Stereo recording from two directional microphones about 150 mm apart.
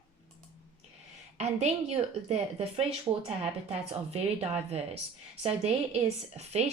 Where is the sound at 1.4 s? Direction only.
45° right (ahead or behind).